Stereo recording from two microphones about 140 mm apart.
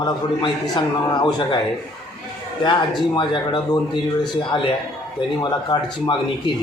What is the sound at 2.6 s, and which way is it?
Speech, 35° left (ahead or behind).